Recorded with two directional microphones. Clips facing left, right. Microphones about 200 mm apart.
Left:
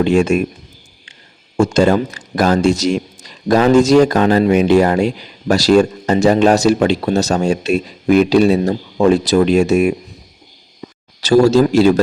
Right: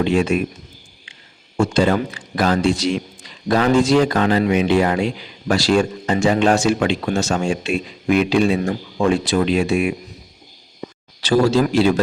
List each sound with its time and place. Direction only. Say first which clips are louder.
0.0 s speech: left 4 dB; 45° left (ahead or behind)
1.5 s speech: left 4 dB; 45° left (ahead or behind)
11.2 s speech: left 5 dB; 40° left (ahead or behind)